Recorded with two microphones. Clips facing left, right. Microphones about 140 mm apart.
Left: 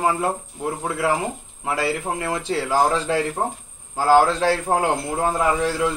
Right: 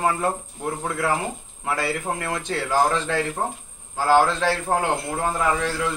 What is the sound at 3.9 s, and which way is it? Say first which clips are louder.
A man's voice: left 2 dB; 10° left (ahead or behind).